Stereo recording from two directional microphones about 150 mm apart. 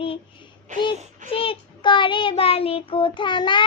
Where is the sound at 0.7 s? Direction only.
55° right (ahead or behind).